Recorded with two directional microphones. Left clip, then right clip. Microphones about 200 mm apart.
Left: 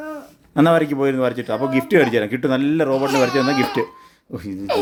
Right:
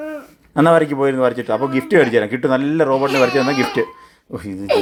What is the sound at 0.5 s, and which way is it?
Speech, 5° left (ahead or behind).